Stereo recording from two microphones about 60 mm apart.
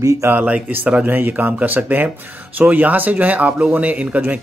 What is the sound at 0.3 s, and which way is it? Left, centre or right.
Speech, right.